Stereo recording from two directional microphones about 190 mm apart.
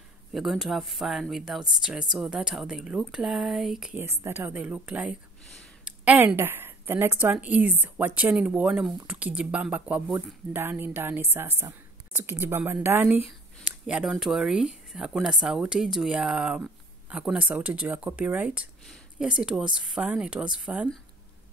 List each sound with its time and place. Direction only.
0.3 s a woman's voice: centre (ahead or behind)